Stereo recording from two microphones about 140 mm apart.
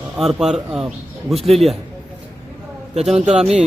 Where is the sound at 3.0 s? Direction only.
5° right (ahead or behind).